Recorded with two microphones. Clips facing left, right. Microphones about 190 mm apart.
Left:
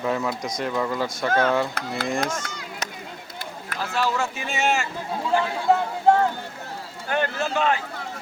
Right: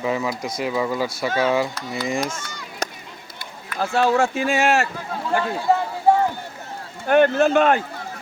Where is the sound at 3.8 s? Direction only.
50° right (ahead or behind).